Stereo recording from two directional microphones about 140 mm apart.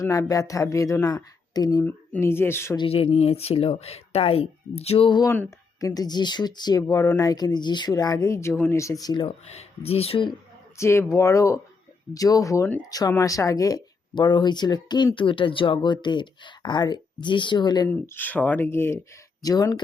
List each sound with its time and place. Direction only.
0.0 s speech: 25° left (ahead or behind)
1.8 s speech: 15° left (ahead or behind)
2.7 s speech: 40° left (ahead or behind)
5.2 s speech: 20° left (ahead or behind)
9.2 s speech: 50° left (ahead or behind)
10.8 s speech: 20° left (ahead or behind)
18.0 s speech: 15° left (ahead or behind)
19.4 s speech: 25° left (ahead or behind)